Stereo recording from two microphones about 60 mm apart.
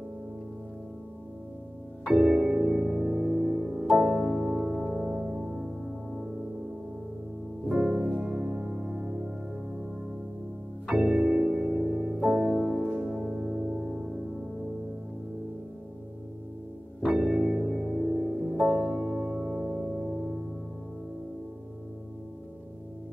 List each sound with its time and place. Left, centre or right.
2.0 s music: centre
7.7 s music: centre
10.9 s music: centre
17.0 s music: centre